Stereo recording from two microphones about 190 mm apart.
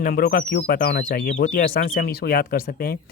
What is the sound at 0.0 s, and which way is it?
Speech, 50° left (ahead or behind).